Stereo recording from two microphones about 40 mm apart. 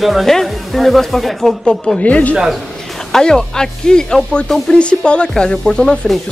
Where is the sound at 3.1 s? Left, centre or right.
Centre.